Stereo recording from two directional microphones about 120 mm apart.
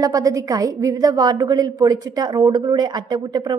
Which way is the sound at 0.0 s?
30° right (ahead or behind).